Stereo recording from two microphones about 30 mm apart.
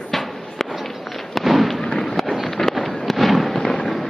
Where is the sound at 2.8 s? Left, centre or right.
Centre.